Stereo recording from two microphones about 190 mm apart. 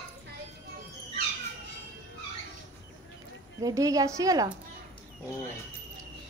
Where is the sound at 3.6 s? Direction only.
20° right (ahead or behind).